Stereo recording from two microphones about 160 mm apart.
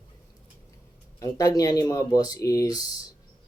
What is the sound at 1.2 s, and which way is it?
Speech, 20° left (ahead or behind).